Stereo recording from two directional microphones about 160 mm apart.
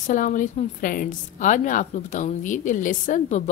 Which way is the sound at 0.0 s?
55° left (ahead or behind).